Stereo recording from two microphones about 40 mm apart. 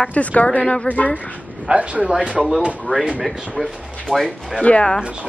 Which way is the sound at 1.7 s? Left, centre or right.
Right.